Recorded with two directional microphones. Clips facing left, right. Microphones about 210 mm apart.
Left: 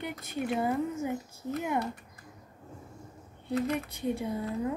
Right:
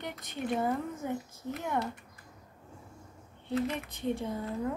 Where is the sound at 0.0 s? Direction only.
10° left (ahead or behind).